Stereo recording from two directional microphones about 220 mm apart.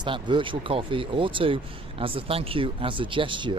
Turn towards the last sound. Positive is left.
turn(degrees=-20)  # may be behind; listen again after turning